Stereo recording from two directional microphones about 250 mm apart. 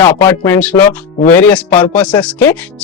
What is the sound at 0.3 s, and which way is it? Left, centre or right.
Speech, centre.